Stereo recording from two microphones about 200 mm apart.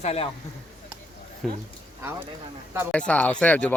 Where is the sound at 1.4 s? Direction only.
Centre (ahead or behind).